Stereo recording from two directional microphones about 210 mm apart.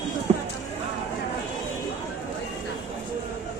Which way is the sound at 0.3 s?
35° right (ahead or behind).